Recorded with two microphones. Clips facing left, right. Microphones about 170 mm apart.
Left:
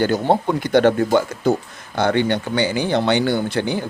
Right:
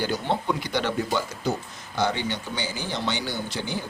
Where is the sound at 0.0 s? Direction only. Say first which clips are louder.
Left 9 dB; 50° left (ahead or behind).